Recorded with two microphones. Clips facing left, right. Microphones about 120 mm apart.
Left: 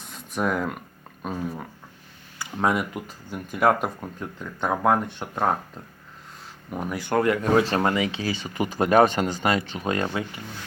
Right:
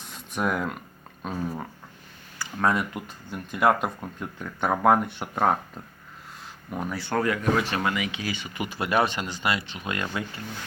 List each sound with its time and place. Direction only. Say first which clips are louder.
0.0 s a sound: left 1 dB; centre (ahead or behind)
1.2 s speech: even; 5° left (ahead or behind)
2.4 s a sound: left 1 dB; 20° left (ahead or behind)
2.7 s speech: left 1 dB; 5° left (ahead or behind)
6.9 s speech: left 4 dB; 15° left (ahead or behind)
7.7 s speech: left 4 dB; 35° left (ahead or behind)